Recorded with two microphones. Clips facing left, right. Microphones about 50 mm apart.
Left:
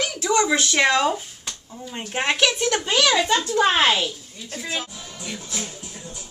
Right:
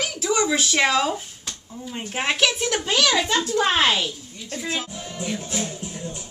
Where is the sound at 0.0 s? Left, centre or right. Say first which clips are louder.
Left 2 dB; centre.